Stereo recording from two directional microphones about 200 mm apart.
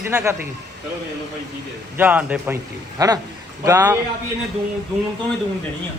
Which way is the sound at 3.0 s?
20° right (ahead or behind).